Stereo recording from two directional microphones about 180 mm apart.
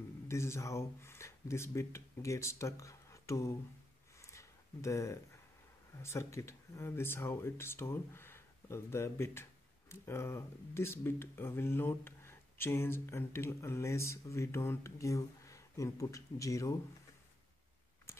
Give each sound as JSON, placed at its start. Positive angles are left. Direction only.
{"t": 0.3, "sound": "speech", "side_deg": 15}
{"t": 4.2, "sound": "a sound", "side_deg": 15}
{"t": 6.0, "sound": "speech", "side_deg": 15}